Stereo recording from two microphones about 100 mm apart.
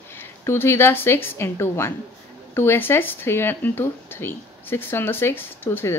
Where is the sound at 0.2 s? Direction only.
25° left (ahead or behind).